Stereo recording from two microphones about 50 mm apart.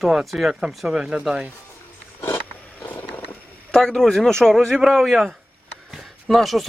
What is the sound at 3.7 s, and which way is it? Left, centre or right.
Speech, centre.